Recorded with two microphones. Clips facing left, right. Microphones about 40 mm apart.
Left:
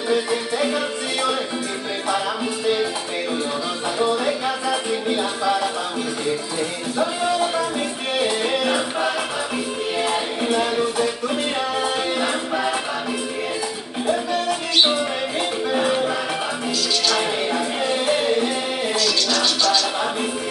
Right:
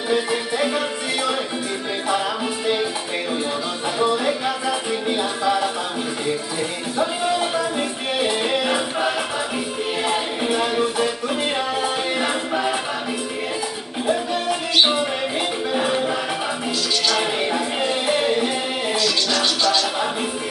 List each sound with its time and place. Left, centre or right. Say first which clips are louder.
0.1 s music: even; centre
4.0 s music: right 1 dB; centre
7.0 s music: even; centre
14.0 s music: even; centre
15.7 s music: left 1 dB; centre
18.9 s music: even; right